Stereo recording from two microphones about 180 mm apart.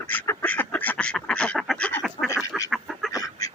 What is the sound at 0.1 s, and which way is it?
Duck, 10° left (ahead or behind).